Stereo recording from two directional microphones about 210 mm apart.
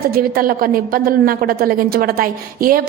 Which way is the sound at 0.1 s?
45° right (ahead or behind).